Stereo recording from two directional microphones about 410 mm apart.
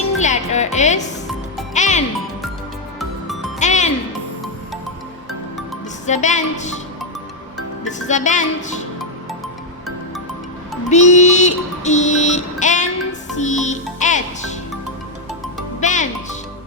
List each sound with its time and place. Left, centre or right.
0.2 s music: centre
3.6 s music: centre
6.1 s speech: centre
7.9 s speech: centre
10.8 s music: centre
15.8 s music: centre